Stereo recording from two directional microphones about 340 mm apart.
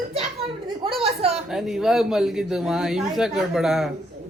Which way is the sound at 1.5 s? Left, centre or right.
Centre.